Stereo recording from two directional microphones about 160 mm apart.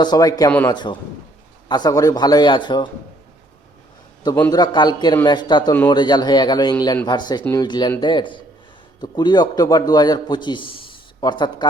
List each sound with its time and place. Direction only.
0.0 s a man's voice: 25° left (ahead or behind)
4.5 s a man's voice: 25° left (ahead or behind)